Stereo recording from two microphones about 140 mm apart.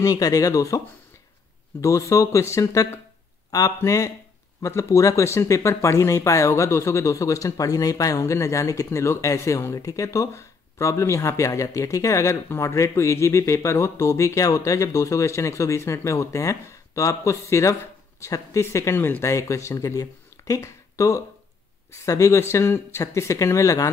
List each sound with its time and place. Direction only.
0.0 s speech: 25° left (ahead or behind)